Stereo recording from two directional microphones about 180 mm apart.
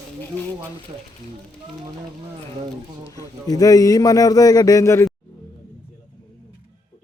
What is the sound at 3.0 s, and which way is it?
A man's voice, 20° left (ahead or behind).